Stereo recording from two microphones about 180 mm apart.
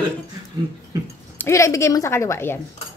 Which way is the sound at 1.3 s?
15° left (ahead or behind).